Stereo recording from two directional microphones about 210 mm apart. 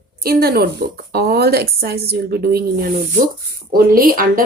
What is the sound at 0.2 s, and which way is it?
A woman's voice, 45° right (ahead or behind).